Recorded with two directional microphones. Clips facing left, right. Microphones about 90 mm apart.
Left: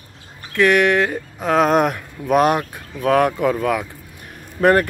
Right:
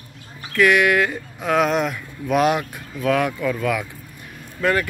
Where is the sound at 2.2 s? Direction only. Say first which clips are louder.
Left 3 dB; 40° left (ahead or behind).